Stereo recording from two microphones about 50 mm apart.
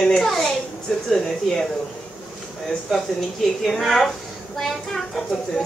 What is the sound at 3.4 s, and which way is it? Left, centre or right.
A woman's voice, centre.